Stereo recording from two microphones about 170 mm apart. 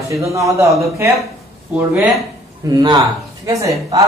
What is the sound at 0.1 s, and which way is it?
Speech, 20° right (ahead or behind).